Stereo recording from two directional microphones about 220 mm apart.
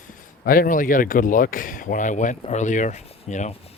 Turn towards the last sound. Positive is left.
turn(degrees=30)  # may be behind; listen again after turning